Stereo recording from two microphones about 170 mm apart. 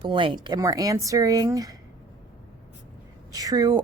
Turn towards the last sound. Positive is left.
turn(degrees=-20)  # may be behind; listen again after turning